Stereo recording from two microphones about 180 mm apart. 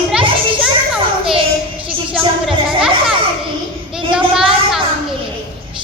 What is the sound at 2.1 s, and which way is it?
Music, 5° right (ahead or behind).